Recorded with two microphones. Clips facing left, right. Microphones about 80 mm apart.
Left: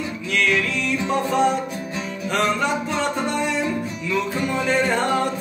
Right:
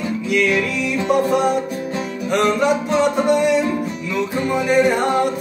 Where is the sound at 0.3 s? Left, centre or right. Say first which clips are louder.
Right 3 dB; centre.